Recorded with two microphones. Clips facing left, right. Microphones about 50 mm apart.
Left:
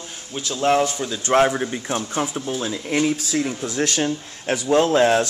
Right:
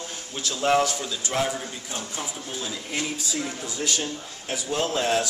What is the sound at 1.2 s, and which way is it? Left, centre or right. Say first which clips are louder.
Speech: left 11 dB; left.